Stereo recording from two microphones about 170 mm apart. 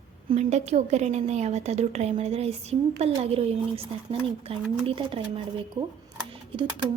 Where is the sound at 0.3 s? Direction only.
40° right (ahead or behind).